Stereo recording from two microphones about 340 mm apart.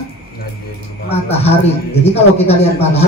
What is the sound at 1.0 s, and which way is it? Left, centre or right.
Speech, centre.